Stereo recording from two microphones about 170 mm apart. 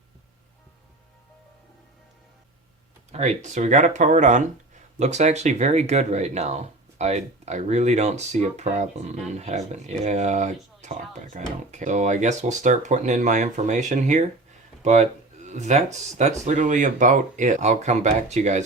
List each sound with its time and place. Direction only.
3.1 s speech: 40° right (ahead or behind)